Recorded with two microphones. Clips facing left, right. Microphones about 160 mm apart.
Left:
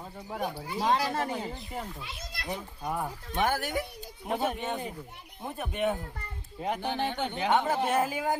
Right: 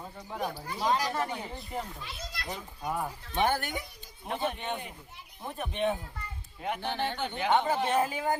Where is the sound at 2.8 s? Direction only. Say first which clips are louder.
Right 1 dB; 5° left (ahead or behind).